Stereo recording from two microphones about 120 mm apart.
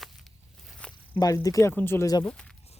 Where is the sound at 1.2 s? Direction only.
30° left (ahead or behind).